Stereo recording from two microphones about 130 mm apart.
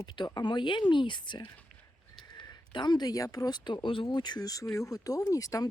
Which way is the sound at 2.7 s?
35° left (ahead or behind).